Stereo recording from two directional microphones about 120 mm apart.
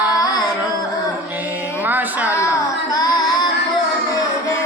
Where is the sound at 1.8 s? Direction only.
15° right (ahead or behind).